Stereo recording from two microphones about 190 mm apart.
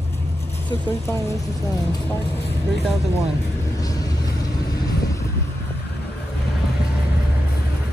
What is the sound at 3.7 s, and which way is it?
Vehicle, 20° left (ahead or behind).